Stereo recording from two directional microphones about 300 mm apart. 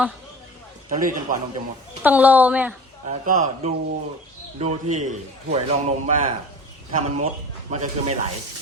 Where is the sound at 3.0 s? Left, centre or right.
Right.